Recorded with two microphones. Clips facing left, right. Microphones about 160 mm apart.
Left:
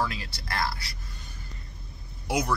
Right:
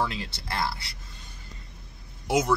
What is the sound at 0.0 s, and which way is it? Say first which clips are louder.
Speech: right 1 dB; 25° right (ahead or behind).